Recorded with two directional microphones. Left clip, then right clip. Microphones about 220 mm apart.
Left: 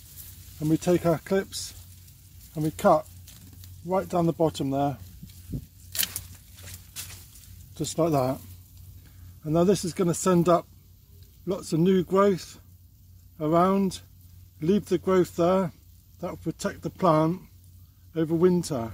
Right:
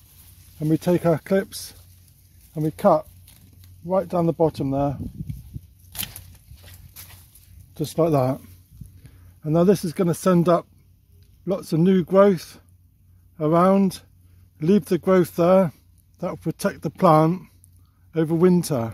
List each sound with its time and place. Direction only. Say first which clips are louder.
0.6 s speech: right 3 dB; 45° right (ahead or behind)
2.5 s speech: right 3 dB; 35° right (ahead or behind)
7.7 s speech: right 4 dB; 45° right (ahead or behind)
9.4 s speech: right 4 dB; 45° right (ahead or behind)